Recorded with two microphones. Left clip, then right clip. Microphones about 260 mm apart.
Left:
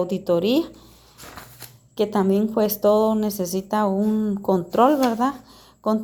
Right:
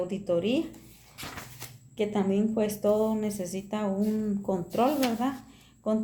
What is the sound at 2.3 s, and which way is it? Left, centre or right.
A woman's voice, left.